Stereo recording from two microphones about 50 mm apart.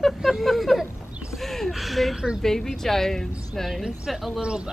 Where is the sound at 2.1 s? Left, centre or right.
Centre.